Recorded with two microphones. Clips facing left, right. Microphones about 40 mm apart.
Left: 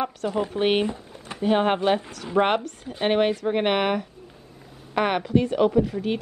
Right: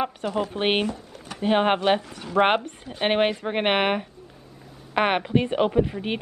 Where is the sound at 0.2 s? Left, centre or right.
Centre.